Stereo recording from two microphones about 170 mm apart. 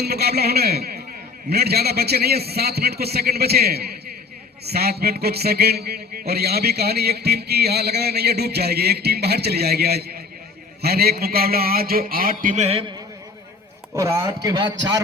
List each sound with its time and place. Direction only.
0.0 s a man's voice: 70° right (ahead or behind); by 12.8 s 40° right (ahead or behind)
13.9 s a man's voice: 15° right (ahead or behind)